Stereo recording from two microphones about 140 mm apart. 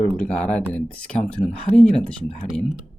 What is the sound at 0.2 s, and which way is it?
Speech, 10° left (ahead or behind).